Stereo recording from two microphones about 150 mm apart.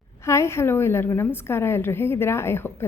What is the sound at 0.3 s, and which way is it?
A woman's voice, 20° left (ahead or behind).